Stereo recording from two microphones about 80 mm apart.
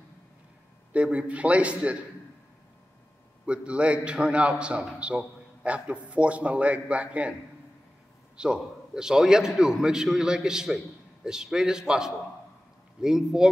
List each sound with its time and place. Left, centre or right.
0.9 s a man's voice: centre
3.4 s a man's voice: centre
8.4 s a man's voice: centre